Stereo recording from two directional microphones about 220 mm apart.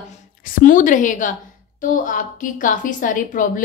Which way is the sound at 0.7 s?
35° left (ahead or behind).